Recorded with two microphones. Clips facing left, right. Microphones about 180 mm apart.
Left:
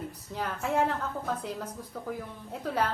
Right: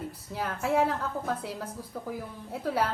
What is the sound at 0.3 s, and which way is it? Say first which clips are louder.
A woman's voice: right 2 dB; 5° right (ahead or behind).